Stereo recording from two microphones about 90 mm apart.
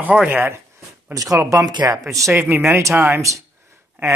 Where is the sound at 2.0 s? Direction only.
35° right (ahead or behind).